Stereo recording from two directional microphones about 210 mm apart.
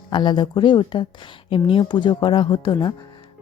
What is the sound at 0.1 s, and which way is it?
Speech, 20° left (ahead or behind).